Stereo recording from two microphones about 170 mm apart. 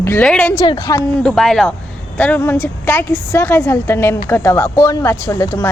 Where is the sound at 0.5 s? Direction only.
25° left (ahead or behind).